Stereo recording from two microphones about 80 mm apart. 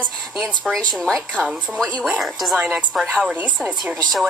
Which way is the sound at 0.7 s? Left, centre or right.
Centre.